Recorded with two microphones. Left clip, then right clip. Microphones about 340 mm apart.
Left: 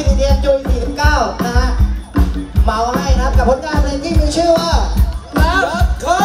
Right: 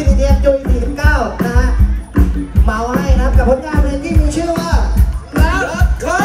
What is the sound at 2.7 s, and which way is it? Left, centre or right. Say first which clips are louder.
Music: left 1 dB; left.